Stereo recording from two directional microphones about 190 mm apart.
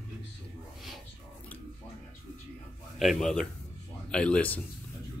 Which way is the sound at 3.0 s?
Centre (ahead or behind).